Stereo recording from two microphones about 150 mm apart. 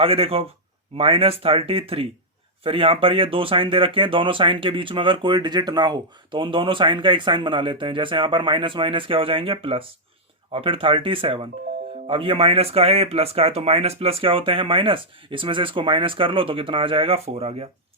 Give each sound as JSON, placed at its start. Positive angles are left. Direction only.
{"t": 0.0, "sound": "speech", "side_deg": -40}